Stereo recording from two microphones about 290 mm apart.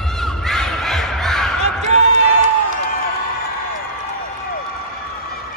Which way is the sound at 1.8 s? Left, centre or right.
Right.